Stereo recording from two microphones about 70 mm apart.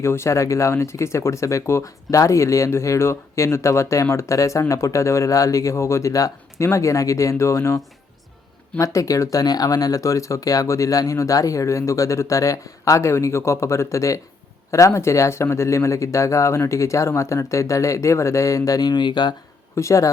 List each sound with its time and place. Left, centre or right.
0.0 s speech: left
8.8 s speech: left
19.7 s speech: left